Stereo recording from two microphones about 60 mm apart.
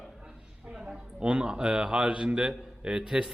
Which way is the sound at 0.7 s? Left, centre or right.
Centre.